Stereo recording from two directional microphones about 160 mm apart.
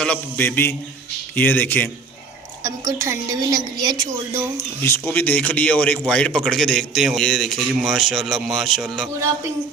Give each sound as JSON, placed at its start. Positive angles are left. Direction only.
{"t": 0.0, "sound": "a man's voice", "side_deg": 10}
{"t": 2.6, "sound": "a woman's voice", "side_deg": -20}
{"t": 4.5, "sound": "a man's voice", "side_deg": 15}